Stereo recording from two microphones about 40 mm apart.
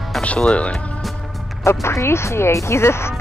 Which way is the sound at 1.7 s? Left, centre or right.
Left.